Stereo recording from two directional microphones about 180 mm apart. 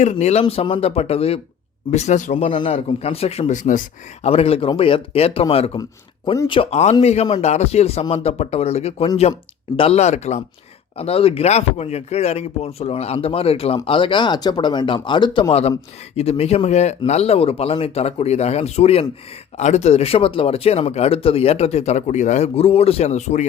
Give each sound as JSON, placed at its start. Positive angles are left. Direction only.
{"t": 0.0, "sound": "speech", "side_deg": 40}
{"t": 6.3, "sound": "speech", "side_deg": 20}
{"t": 6.6, "sound": "speech", "side_deg": 35}